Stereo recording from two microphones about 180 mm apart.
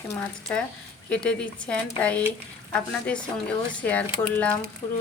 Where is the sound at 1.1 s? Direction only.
5° left (ahead or behind).